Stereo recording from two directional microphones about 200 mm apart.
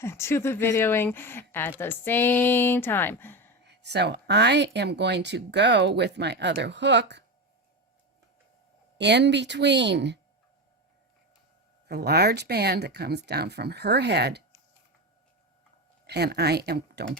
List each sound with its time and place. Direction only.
0.0 s speech: 15° left (ahead or behind)
3.6 s speech: 60° right (ahead or behind)
9.0 s speech: 60° right (ahead or behind)
11.9 s speech: 55° right (ahead or behind)
16.0 s speech: 55° right (ahead or behind)